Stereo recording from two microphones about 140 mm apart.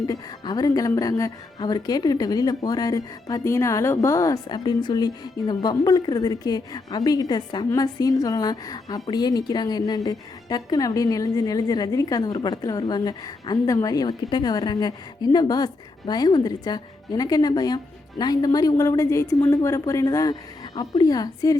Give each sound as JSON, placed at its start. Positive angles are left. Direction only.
{"t": 0.1, "sound": "speech", "side_deg": 25}